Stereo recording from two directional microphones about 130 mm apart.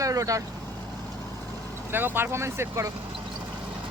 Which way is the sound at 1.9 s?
15° right (ahead or behind).